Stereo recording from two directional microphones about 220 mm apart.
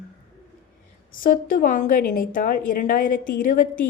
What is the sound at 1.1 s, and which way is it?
A woman's voice, 40° left (ahead or behind).